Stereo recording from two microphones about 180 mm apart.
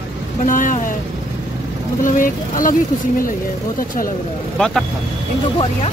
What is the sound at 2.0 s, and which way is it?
Speech, 50° left (ahead or behind).